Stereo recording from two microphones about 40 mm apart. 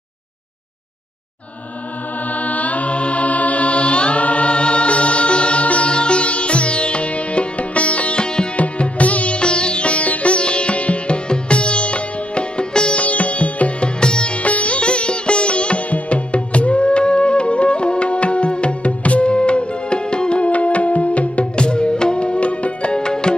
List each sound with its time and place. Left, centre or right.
2.3 s music: left
8.5 s sitar: left
13.0 s music: left
13.9 s sitar: left